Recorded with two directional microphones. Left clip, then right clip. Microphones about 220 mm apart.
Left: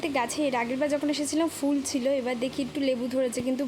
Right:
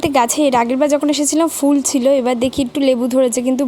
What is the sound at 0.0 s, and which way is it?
A woman's voice, 40° right (ahead or behind).